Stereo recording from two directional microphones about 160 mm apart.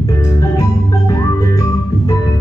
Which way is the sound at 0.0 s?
20° left (ahead or behind).